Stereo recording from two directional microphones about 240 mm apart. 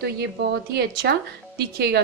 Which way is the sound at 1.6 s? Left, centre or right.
Right.